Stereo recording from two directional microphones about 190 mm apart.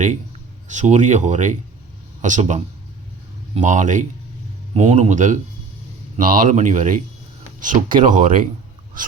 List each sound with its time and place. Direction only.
0.7 s speech: 40° right (ahead or behind)